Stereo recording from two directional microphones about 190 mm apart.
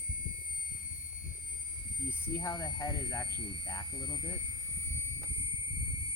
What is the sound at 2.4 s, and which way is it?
Speech, 20° left (ahead or behind).